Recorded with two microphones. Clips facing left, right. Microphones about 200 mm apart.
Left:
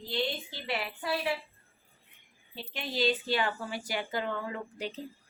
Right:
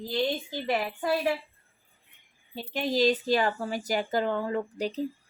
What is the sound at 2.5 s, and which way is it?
Speech, 45° right (ahead or behind).